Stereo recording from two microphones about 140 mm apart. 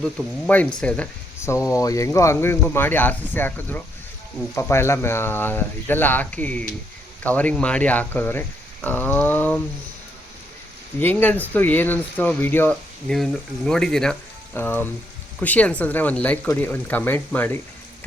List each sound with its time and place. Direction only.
0.4 s speech: 10° left (ahead or behind)
1.4 s speech: 20° left (ahead or behind)
11.0 s speech: 10° left (ahead or behind)
13.1 s speech: 5° left (ahead or behind)